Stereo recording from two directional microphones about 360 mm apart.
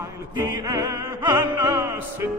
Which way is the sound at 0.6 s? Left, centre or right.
Centre.